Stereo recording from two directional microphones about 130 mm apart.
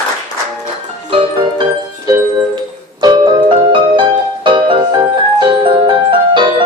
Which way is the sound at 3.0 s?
35° right (ahead or behind).